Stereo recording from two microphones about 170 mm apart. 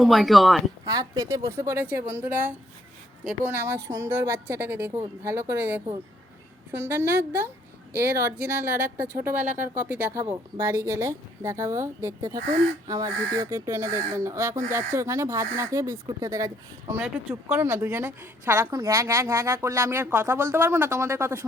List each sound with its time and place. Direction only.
0.0 s speech: centre (ahead or behind)
0.9 s a woman's voice: 20° right (ahead or behind)